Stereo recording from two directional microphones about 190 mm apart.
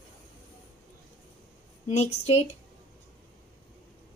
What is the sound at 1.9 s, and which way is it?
Speech, 35° left (ahead or behind).